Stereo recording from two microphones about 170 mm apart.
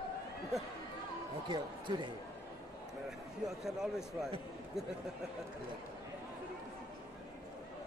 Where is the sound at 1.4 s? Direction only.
25° right (ahead or behind).